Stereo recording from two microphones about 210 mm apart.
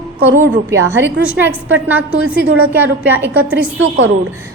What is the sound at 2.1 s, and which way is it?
Speech, 65° right (ahead or behind).